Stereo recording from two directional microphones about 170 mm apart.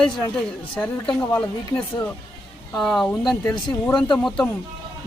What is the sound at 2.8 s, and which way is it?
Speech, centre (ahead or behind).